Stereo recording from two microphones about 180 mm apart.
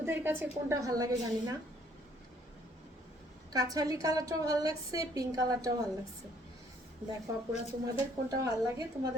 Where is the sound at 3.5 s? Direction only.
20° right (ahead or behind).